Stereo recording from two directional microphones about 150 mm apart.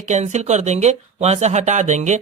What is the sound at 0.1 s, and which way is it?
Speech, 50° right (ahead or behind).